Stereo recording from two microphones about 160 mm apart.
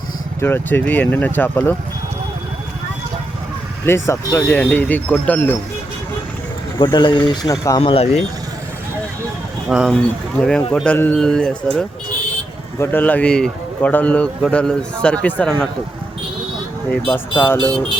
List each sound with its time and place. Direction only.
0.3 s a man's voice: 15° left (ahead or behind)
3.8 s a man's voice: 15° left (ahead or behind)
6.8 s speech: 30° left (ahead or behind)
7.8 s speech: 35° left (ahead or behind)
9.6 s a man's voice: 5° right (ahead or behind)
17.1 s a man's voice: 10° left (ahead or behind)